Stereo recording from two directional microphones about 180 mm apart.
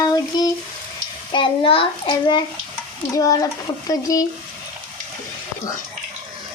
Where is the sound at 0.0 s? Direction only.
20° left (ahead or behind).